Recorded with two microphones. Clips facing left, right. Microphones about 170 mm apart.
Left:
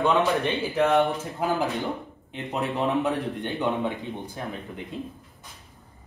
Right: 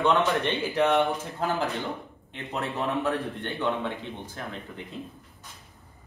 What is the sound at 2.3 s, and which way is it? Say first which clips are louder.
A man's voice: left 3 dB; 15° left (ahead or behind).